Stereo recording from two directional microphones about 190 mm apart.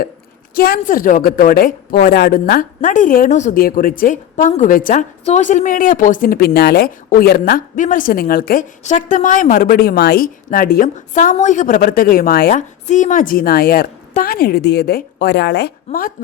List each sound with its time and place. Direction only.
0.5 s a woman's voice: 50° left (ahead or behind)